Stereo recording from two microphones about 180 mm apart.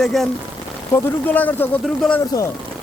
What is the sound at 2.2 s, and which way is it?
Speech, 20° left (ahead or behind).